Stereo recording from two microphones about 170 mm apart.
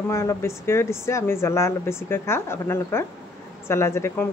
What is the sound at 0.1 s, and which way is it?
Speech, 15° left (ahead or behind).